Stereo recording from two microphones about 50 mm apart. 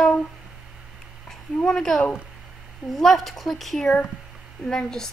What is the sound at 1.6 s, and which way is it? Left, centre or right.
A woman's voice, centre.